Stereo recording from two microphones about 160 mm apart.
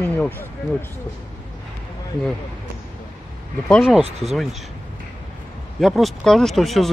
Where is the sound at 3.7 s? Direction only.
5° left (ahead or behind).